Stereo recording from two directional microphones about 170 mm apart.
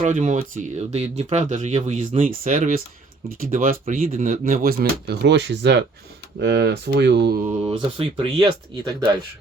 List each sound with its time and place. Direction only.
0.0 s speech: 45° right (ahead or behind); by 5.8 s 90° right
6.4 s speech: 75° right (ahead or behind)
7.4 s speech: 35° right (ahead or behind)